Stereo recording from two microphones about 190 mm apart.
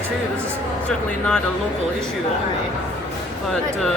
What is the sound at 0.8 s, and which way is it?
Speech, 5° left (ahead or behind).